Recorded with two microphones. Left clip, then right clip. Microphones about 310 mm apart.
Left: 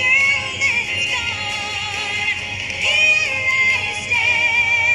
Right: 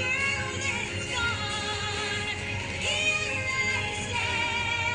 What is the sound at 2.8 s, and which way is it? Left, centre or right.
Music, left.